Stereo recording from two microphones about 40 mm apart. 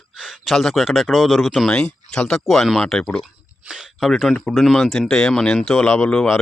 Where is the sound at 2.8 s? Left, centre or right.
Centre.